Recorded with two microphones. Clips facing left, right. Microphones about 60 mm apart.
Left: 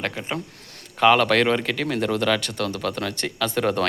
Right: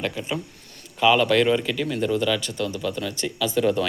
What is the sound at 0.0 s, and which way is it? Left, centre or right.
Speech, left.